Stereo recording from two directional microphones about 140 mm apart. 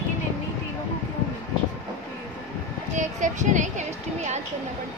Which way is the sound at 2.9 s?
60° right (ahead or behind).